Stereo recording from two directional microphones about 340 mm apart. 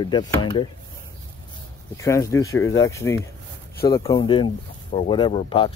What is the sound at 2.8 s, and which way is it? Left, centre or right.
Speech, centre.